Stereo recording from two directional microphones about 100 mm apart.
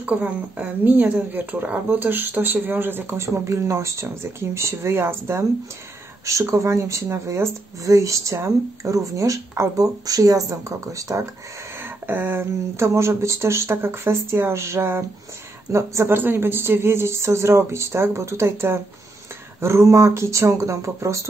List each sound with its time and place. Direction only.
0.0 s a woman's voice: 15° right (ahead or behind); by 11.2 s 30° right (ahead or behind)
11.8 s speech: 20° right (ahead or behind)